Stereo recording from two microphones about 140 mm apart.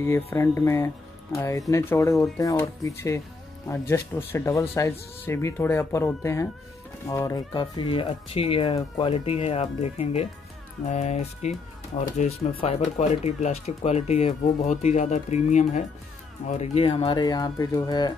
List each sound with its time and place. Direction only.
0.0 s speech: 20° left (ahead or behind)